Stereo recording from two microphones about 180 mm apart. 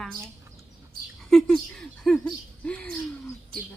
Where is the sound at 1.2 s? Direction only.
Centre (ahead or behind).